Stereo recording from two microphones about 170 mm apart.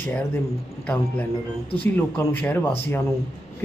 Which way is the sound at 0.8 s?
10° left (ahead or behind).